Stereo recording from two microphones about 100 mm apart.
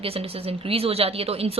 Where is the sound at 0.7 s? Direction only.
80° right.